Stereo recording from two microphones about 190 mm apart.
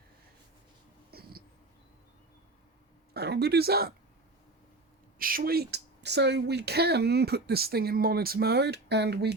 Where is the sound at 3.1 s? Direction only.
60° right (ahead or behind).